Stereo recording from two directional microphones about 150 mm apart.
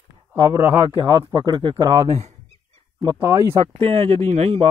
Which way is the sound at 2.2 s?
45° right (ahead or behind).